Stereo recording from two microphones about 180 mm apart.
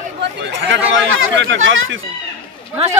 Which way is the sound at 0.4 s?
80° right.